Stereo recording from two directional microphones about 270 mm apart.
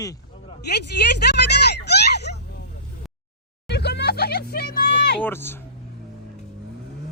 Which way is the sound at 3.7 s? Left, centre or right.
Left.